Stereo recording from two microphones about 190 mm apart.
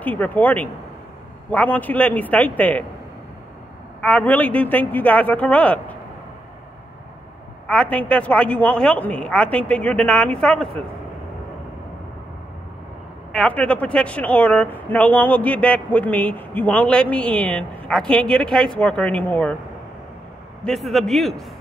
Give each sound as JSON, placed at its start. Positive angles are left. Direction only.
{"t": 0.0, "sound": "speech", "side_deg": 10}
{"t": 4.0, "sound": "speech", "side_deg": 5}
{"t": 7.6, "sound": "speech", "side_deg": 5}
{"t": 13.3, "sound": "speech", "side_deg": 5}
{"t": 20.6, "sound": "a man's voice", "side_deg": 0}